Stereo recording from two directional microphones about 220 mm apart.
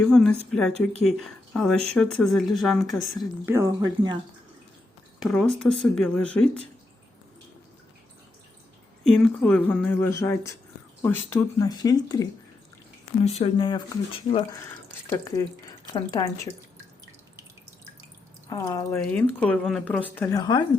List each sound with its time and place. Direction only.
0.0 s speech: 5° left (ahead or behind)
3.4 s speech: 10° right (ahead or behind)
5.2 s speech: centre (ahead or behind)
9.0 s speech: 5° left (ahead or behind)
13.2 s speech: 30° left (ahead or behind)
15.9 s speech: 15° left (ahead or behind)
18.4 s speech: 15° left (ahead or behind)